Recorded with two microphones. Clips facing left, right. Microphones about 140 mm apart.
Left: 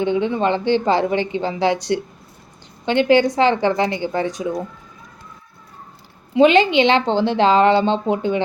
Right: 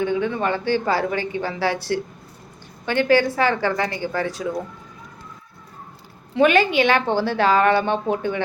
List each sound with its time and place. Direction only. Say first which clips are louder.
0.0 s speech: left 3 dB; 20° left (ahead or behind)
6.3 s speech: left 4 dB; 20° left (ahead or behind)